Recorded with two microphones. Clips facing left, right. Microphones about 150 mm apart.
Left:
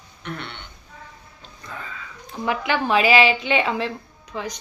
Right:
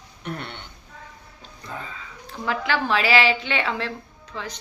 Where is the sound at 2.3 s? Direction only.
15° left (ahead or behind).